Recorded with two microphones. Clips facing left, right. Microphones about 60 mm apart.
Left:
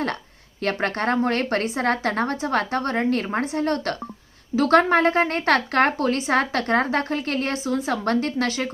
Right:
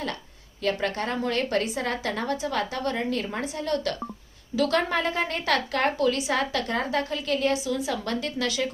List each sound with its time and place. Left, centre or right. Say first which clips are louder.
0.6 s a woman's voice: left 3 dB; left